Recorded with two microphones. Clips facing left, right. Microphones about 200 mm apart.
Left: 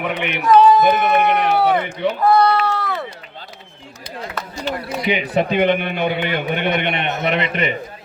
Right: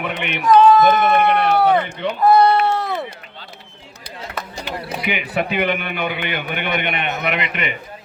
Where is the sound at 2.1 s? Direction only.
20° right (ahead or behind).